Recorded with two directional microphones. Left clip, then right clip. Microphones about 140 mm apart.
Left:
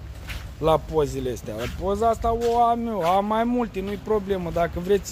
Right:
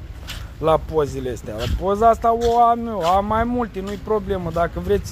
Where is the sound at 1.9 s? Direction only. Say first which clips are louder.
Right 7 dB; 40° right (ahead or behind).